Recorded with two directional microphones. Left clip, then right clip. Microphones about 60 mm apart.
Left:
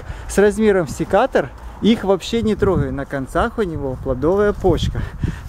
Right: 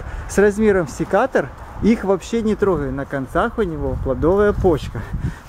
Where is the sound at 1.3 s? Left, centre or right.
Left.